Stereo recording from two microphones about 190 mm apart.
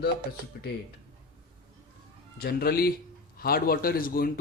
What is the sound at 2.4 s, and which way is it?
Speech, 55° left (ahead or behind).